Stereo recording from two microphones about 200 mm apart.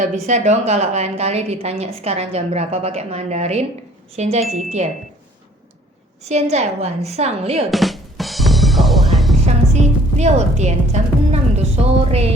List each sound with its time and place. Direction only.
0.0 s a woman's voice: 35° right (ahead or behind)
6.2 s a woman's voice: 35° right (ahead or behind)
7.7 s music: centre (ahead or behind)
10.2 s a woman's voice: 35° right (ahead or behind)